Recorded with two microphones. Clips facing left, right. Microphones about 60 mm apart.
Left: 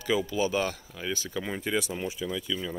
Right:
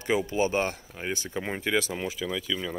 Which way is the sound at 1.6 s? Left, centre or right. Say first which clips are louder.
Right 3 dB; right.